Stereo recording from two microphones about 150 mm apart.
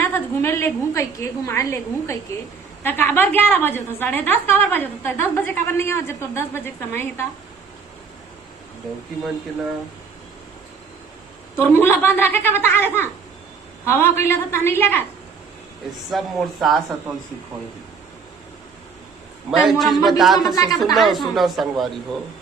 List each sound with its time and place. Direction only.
0.0 s a woman's voice: 15° left (ahead or behind)
11.5 s a woman's voice: 15° left (ahead or behind)
16.0 s a man's voice: centre (ahead or behind)
19.5 s a man's voice: centre (ahead or behind)